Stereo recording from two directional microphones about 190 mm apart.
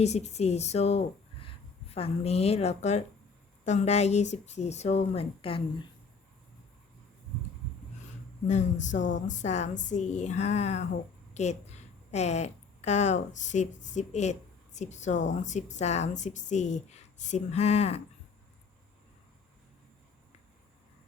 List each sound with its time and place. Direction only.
0.0 s a woman's voice: 35° left (ahead or behind)
8.4 s a woman's voice: 40° left (ahead or behind)
9.0 s a woman's voice: 75° left (ahead or behind)
9.3 s a woman's voice: 35° left (ahead or behind)